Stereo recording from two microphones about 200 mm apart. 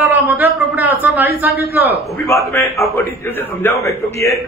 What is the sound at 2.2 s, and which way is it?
A man's voice, 15° left (ahead or behind).